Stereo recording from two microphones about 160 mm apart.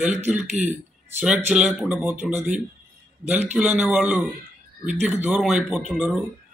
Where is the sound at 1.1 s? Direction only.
10° right (ahead or behind).